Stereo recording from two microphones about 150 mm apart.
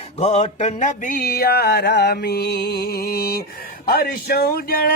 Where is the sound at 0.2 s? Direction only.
40° left (ahead or behind); by 3.4 s 90° left.